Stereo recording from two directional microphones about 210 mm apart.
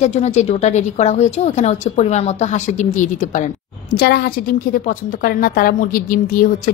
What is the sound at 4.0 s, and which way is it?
A woman's voice, 45° left (ahead or behind).